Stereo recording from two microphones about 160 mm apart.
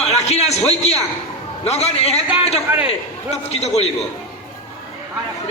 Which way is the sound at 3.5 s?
40° left (ahead or behind).